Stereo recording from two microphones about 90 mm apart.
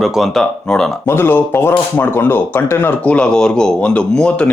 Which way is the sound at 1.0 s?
25° left (ahead or behind).